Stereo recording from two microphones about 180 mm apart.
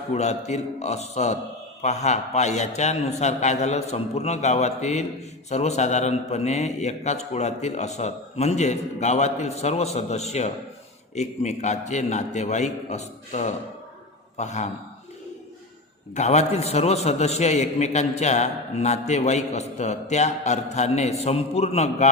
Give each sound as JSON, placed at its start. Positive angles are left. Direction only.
{"t": 0.1, "sound": "a man's voice", "side_deg": 40}
{"t": 16.1, "sound": "a man's voice", "side_deg": 40}